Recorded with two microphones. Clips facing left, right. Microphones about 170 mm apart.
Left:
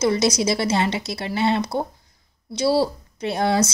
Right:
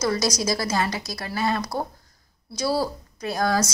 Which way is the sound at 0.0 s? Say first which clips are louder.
Left 4 dB; 25° left (ahead or behind).